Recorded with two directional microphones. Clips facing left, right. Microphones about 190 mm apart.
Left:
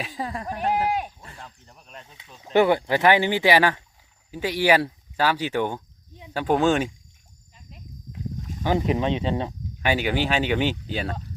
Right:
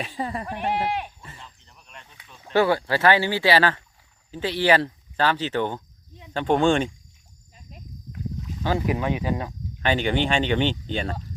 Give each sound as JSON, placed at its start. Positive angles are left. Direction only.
{"t": 0.0, "sound": "speech", "side_deg": 0}
{"t": 0.4, "sound": "speech", "side_deg": 40}
{"t": 1.4, "sound": "a sound", "side_deg": 40}
{"t": 2.0, "sound": "speech", "side_deg": 20}
{"t": 8.6, "sound": "speech", "side_deg": 20}
{"t": 9.8, "sound": "speech", "side_deg": 5}